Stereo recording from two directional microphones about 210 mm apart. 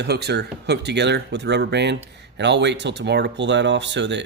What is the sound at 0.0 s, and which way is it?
Speech, 50° right (ahead or behind).